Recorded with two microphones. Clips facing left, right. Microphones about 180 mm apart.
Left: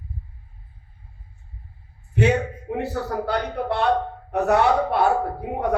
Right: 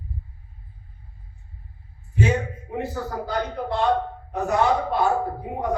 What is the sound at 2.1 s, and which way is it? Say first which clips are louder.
A man's voice: left 3 dB; 65° left (ahead or behind).